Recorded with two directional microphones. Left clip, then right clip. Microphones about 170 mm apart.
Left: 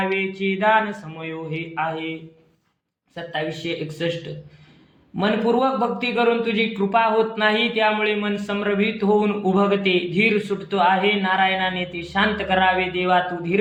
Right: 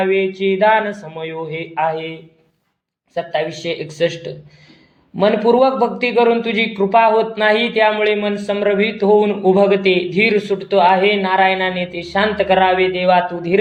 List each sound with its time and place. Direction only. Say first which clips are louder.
0.0 s a man's voice: right 7 dB; 15° right (ahead or behind)
3.3 s speech: right 4 dB; 20° right (ahead or behind)
5.1 s a man's voice: right 7 dB; 20° right (ahead or behind)